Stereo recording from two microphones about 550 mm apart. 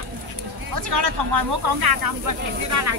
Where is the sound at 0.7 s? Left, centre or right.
Right.